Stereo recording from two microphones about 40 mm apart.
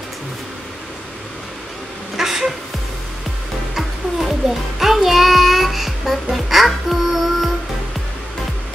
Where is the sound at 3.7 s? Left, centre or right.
Centre.